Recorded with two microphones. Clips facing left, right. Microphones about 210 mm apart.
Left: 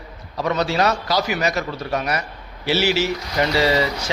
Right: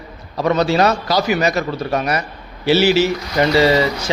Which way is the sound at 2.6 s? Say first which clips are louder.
Right 6 dB; 30° right (ahead or behind).